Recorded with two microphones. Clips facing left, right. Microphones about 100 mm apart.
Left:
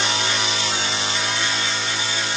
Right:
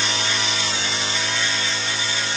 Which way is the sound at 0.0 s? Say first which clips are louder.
Left 2 dB; 35° left (ahead or behind).